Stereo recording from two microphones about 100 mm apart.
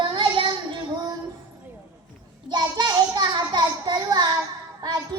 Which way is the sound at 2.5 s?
45° right (ahead or behind).